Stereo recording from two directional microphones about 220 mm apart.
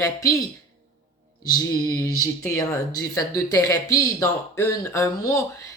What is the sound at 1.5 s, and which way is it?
Speech, 15° left (ahead or behind).